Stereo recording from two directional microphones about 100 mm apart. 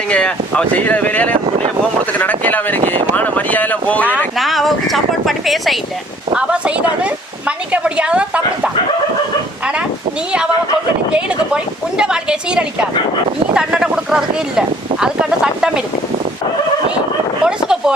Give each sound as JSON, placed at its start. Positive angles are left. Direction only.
{"t": 0.1, "sound": "speech", "side_deg": 10}
{"t": 4.4, "sound": "speech", "side_deg": 0}
{"t": 6.3, "sound": "a woman's voice", "side_deg": -10}
{"t": 11.1, "sound": "a woman's voice", "side_deg": -10}
{"t": 17.4, "sound": "a sound", "side_deg": -5}